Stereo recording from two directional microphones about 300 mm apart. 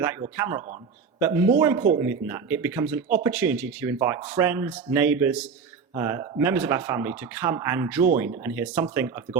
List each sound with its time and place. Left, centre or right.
0.0 s speech: centre